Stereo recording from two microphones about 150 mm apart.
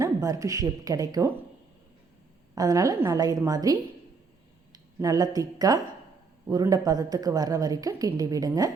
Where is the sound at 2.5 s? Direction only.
25° right (ahead or behind).